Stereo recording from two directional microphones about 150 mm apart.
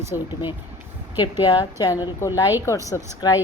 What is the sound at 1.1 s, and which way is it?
A woman's voice, 30° left (ahead or behind).